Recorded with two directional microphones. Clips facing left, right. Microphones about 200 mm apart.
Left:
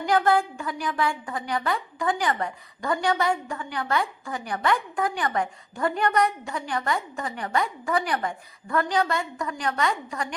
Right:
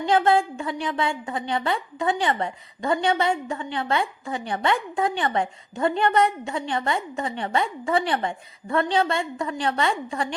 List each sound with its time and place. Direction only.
0.0 s a woman's voice: 25° right (ahead or behind)